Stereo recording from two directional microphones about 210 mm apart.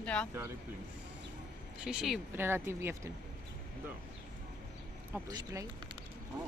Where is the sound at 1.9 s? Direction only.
5° right (ahead or behind).